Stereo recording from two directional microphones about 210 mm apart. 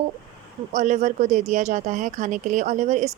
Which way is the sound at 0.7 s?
35° right (ahead or behind).